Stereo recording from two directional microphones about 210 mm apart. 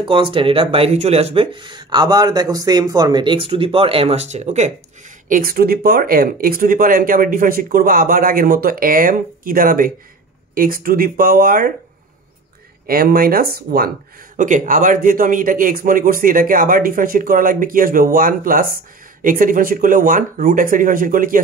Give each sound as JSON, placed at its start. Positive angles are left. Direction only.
{"t": 0.0, "sound": "speech", "side_deg": -25}
{"t": 5.3, "sound": "speech", "side_deg": -45}
{"t": 12.8, "sound": "speech", "side_deg": -45}